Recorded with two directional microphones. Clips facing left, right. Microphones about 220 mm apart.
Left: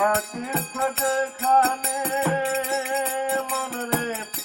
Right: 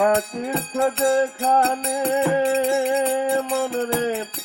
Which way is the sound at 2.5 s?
30° right (ahead or behind).